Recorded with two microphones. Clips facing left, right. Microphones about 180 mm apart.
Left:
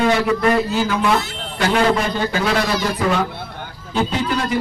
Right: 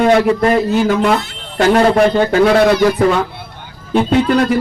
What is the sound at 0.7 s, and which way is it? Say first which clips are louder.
Speech: right 5 dB; 55° right (ahead or behind).